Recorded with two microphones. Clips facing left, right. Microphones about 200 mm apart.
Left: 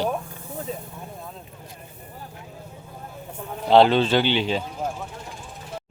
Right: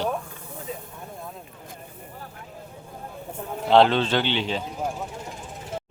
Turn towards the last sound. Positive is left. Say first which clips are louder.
# left 3 dB
turn(degrees=10)  # may be behind; listen again after turning